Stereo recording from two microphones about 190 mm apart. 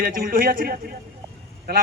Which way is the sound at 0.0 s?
50° right (ahead or behind).